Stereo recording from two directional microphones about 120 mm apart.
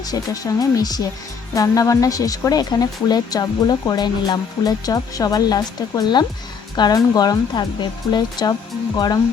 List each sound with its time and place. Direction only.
0.1 s speech: 35° left (ahead or behind)